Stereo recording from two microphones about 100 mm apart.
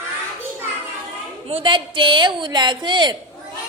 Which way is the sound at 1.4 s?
65° right (ahead or behind).